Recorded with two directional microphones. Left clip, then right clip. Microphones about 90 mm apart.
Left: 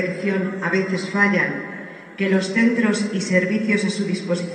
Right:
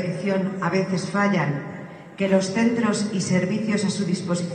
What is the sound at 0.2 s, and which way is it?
A man's voice, 30° right (ahead or behind).